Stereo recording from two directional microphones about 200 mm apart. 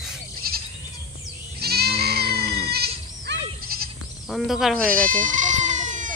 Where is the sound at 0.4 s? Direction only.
50° right (ahead or behind).